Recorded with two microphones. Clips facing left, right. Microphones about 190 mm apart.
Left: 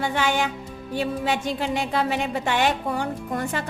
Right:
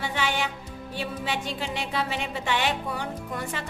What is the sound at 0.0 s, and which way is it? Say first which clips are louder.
Music: left 5 dB; 50° left (ahead or behind).